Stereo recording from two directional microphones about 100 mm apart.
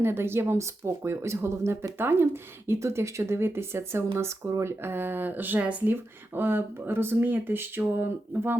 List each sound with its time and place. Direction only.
0.0 s speech: 25° right (ahead or behind)